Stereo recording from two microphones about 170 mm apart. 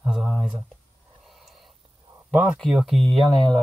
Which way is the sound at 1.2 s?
Centre (ahead or behind).